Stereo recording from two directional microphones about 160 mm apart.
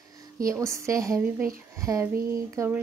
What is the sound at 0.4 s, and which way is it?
Speech, 20° right (ahead or behind).